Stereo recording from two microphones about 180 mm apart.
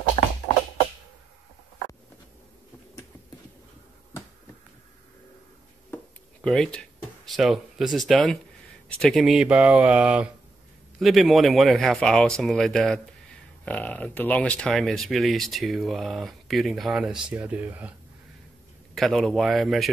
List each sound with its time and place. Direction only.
6.4 s speech: 5° left (ahead or behind)
18.9 s speech: centre (ahead or behind)